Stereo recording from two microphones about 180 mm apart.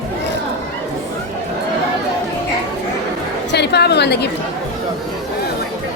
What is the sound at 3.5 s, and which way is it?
Speech, 65° left (ahead or behind).